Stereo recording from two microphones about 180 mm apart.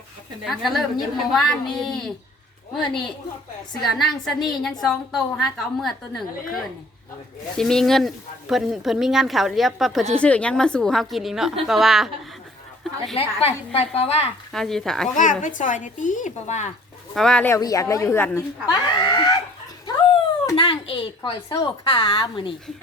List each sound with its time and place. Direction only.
0.4 s speech: centre (ahead or behind)
3.8 s speech: centre (ahead or behind)
13.1 s a woman's voice: 35° left (ahead or behind)
14.5 s speech: centre (ahead or behind)
15.1 s speech: 45° left (ahead or behind)
17.2 s speech: 5° left (ahead or behind)
18.6 s a woman's voice: 25° left (ahead or behind)
20.6 s a woman's voice: 30° left (ahead or behind)